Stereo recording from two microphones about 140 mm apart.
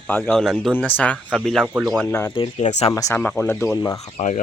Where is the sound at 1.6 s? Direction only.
10° right (ahead or behind).